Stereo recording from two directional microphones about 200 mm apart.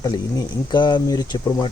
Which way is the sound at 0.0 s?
20° left (ahead or behind).